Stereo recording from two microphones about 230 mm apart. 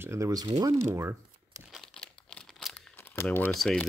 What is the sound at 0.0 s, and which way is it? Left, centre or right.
Speech, centre.